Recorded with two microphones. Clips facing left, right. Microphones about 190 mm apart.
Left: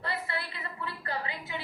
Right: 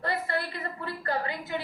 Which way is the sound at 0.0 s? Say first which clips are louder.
Right 5 dB; 45° right (ahead or behind).